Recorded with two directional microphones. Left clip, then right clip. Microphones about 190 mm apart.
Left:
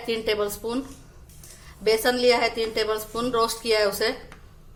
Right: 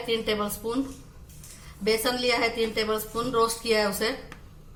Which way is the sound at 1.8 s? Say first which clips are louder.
Left 5 dB; 40° left (ahead or behind).